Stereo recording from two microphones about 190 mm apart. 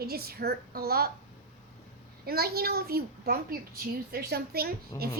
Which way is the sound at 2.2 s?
55° right (ahead or behind).